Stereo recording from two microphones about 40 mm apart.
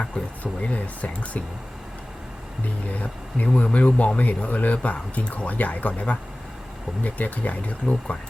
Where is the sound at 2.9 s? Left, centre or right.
Left.